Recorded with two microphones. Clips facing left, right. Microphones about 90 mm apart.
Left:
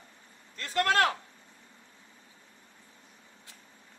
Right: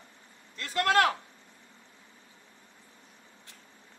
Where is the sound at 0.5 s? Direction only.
40° left (ahead or behind).